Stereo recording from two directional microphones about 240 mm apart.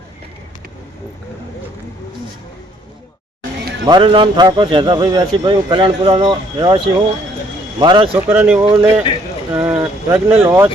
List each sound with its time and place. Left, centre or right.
3.8 s a man's voice: centre
8.3 s speech: centre